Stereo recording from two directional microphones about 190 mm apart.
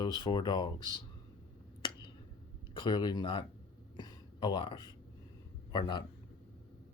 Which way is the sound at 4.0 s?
25° left (ahead or behind).